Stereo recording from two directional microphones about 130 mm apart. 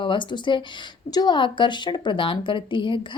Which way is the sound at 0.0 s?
40° left (ahead or behind).